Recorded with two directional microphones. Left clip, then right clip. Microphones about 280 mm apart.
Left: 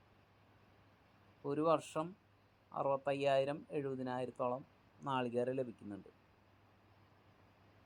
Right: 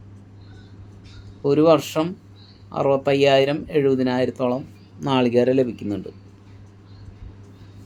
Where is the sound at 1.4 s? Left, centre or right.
Centre.